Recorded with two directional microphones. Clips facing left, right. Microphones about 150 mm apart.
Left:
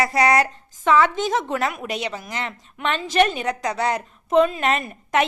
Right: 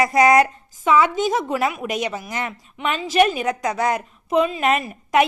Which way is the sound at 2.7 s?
5° right (ahead or behind).